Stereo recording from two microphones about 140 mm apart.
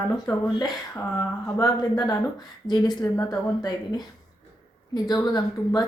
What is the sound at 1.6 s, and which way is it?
A woman's voice, 30° left (ahead or behind).